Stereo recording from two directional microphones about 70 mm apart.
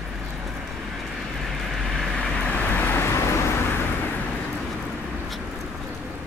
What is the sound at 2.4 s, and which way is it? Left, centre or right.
Vehicle, centre.